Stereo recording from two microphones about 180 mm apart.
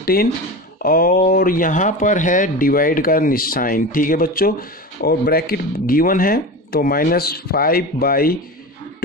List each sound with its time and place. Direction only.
0.0 s speech: 55° left (ahead or behind)